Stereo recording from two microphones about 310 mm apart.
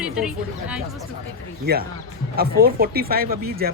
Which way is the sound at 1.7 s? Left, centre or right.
Right.